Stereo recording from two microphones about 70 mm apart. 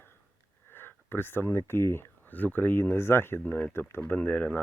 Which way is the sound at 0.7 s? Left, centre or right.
Left.